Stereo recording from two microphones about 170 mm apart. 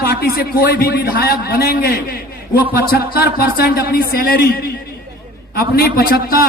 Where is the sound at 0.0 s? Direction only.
65° left (ahead or behind).